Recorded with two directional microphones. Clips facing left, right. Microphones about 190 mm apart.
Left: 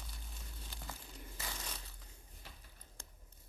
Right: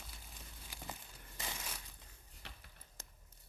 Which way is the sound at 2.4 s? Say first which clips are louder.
Right 2 dB; 75° right (ahead or behind).